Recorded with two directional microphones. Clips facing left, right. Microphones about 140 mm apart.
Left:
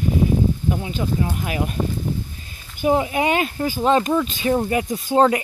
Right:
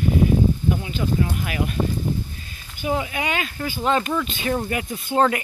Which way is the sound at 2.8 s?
35° left (ahead or behind).